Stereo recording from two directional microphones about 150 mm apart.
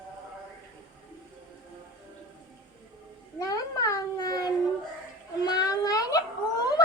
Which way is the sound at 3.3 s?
25° left (ahead or behind).